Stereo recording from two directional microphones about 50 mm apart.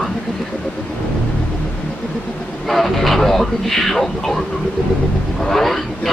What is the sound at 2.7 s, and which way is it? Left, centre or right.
Vehicle, centre.